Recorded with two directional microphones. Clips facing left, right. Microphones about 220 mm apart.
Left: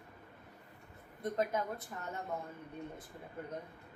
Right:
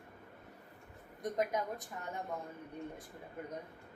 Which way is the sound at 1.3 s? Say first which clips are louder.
Even; 15° right (ahead or behind).